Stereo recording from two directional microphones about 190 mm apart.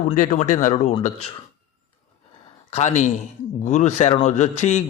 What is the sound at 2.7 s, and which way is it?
A man's voice, 35° left (ahead or behind).